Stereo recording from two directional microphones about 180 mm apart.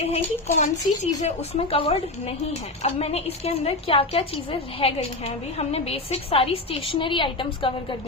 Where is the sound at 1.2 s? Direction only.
35° left (ahead or behind).